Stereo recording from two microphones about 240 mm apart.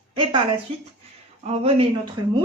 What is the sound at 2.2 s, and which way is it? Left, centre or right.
Speech, right.